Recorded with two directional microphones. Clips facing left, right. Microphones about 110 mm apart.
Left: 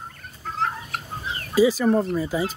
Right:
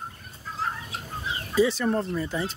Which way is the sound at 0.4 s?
65° left (ahead or behind).